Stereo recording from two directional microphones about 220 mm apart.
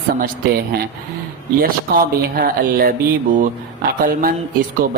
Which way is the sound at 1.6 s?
40° right (ahead or behind).